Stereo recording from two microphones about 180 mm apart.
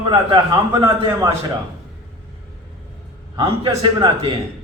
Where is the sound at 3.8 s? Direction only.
25° right (ahead or behind).